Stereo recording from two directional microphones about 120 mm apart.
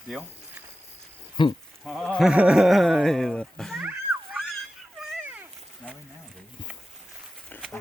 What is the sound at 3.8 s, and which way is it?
Cat, 10° right (ahead or behind).